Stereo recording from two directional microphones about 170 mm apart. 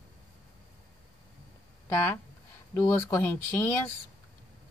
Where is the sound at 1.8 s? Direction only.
15° left (ahead or behind).